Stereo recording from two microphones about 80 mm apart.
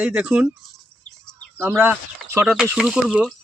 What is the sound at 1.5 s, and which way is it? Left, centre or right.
Speech, right.